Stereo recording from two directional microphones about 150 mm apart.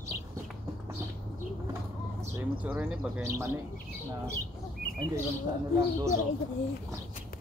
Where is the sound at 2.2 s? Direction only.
10° right (ahead or behind).